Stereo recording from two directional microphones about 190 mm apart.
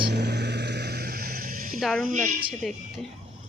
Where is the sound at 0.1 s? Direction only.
60° right (ahead or behind).